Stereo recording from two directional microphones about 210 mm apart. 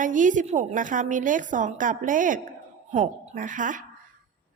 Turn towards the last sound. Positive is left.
turn(degrees=-40)  # may be behind; listen again after turning